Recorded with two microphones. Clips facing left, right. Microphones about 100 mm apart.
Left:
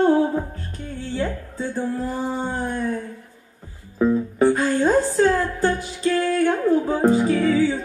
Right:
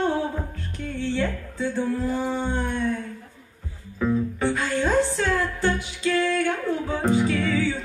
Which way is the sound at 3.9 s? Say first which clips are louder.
Left 5 dB; 35° left (ahead or behind).